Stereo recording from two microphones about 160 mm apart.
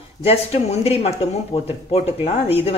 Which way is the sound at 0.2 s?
40° left (ahead or behind).